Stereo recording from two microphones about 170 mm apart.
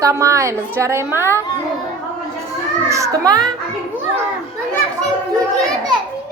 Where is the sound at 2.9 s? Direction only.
20° right (ahead or behind).